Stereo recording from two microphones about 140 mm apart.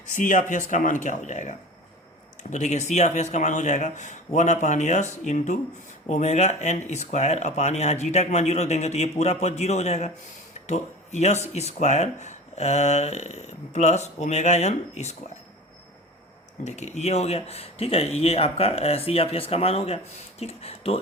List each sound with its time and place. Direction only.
0.1 s speech: 60° left (ahead or behind)
16.6 s speech: 55° left (ahead or behind)